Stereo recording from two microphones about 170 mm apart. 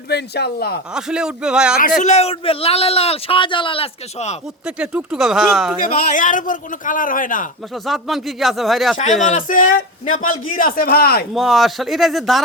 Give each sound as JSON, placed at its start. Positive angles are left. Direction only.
{"t": 0.1, "sound": "speech", "side_deg": 75}
{"t": 0.9, "sound": "speech", "side_deg": -5}
{"t": 2.0, "sound": "a man's voice", "side_deg": 40}
{"t": 4.6, "sound": "speech", "side_deg": -5}
{"t": 5.8, "sound": "a man's voice", "side_deg": 50}
{"t": 7.9, "sound": "speech", "side_deg": 0}
{"t": 9.0, "sound": "a man's voice", "side_deg": 45}
{"t": 11.3, "sound": "speech", "side_deg": 0}